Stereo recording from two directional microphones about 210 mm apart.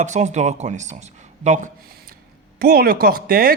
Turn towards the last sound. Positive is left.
turn(degrees=-45)  # may be behind; listen again after turning